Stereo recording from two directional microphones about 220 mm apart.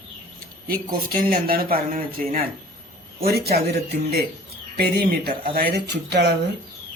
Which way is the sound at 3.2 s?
45° right (ahead or behind).